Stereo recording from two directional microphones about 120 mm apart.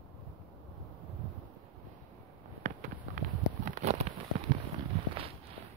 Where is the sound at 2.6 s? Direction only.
90° right.